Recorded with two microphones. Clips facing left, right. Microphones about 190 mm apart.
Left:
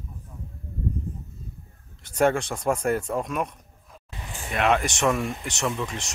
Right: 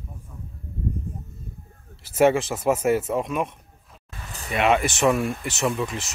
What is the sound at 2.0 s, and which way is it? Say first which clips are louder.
Speech: right 3 dB; 5° right (ahead or behind).